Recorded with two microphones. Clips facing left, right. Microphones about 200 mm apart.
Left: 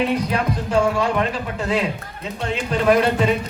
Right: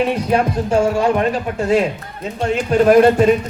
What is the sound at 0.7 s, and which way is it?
Speech, 50° right (ahead or behind).